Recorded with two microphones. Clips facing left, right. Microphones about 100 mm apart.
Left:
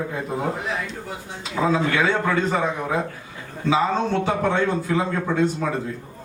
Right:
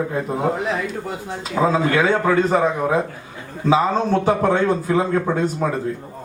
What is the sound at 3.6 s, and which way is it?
Speech, 35° right (ahead or behind).